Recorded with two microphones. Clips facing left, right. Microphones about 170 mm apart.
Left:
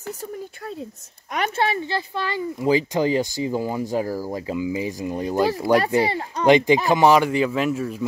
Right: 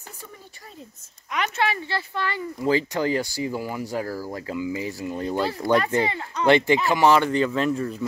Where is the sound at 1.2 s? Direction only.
45° left (ahead or behind).